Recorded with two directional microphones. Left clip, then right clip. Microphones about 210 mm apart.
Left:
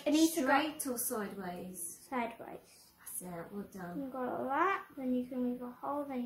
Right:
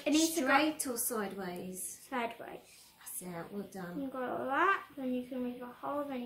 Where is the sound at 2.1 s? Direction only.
15° left (ahead or behind).